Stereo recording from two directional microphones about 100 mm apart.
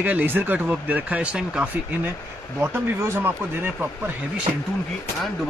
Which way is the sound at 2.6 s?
20° right (ahead or behind).